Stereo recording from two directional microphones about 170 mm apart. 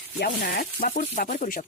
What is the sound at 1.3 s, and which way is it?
Speech, 50° left (ahead or behind).